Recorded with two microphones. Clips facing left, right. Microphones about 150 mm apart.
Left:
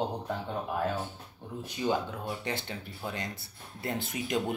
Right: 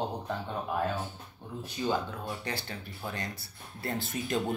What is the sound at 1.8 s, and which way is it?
Speech, 15° left (ahead or behind).